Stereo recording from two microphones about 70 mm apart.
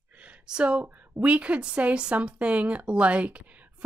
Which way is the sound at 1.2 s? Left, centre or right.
Centre.